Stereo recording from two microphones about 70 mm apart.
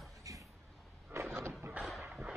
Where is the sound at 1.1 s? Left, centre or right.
Right.